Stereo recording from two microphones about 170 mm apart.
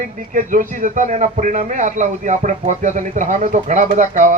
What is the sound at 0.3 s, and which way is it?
A man's voice, 50° right (ahead or behind).